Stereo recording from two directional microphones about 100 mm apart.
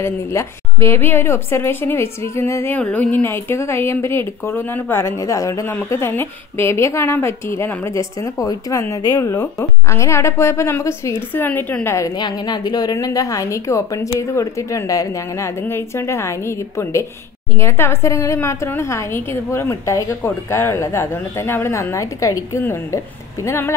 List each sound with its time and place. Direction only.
0.0 s a woman's voice: 30° left (ahead or behind)
2.8 s a woman's voice: 15° left (ahead or behind)
12.2 s a woman's voice: 45° left (ahead or behind); by 23.7 s 30° left (ahead or behind)